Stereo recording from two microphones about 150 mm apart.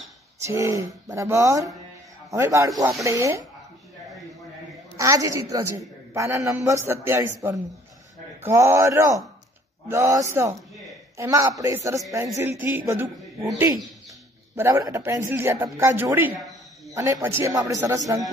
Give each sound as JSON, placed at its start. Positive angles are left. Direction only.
{"t": 0.5, "sound": "a man's voice", "side_deg": -20}
{"t": 4.9, "sound": "a man's voice", "side_deg": -20}
{"t": 14.5, "sound": "speech", "side_deg": -20}
{"t": 16.3, "sound": "a sound", "side_deg": 0}
{"t": 16.9, "sound": "a man's voice", "side_deg": -20}